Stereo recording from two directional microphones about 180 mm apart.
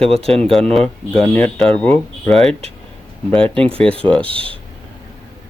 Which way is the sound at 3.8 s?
5° left (ahead or behind).